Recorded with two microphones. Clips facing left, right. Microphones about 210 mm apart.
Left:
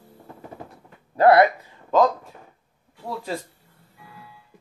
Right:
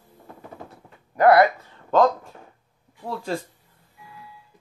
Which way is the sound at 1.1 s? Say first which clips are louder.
Even; 25° left (ahead or behind).